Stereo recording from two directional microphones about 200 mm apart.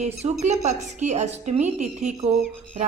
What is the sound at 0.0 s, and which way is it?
A woman's voice, 35° right (ahead or behind).